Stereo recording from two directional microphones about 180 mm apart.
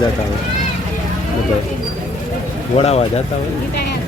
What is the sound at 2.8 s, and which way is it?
Speech, 35° left (ahead or behind).